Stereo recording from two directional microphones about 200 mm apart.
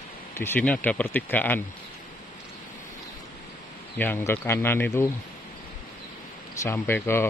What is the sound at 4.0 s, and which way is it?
Speech, 10° left (ahead or behind).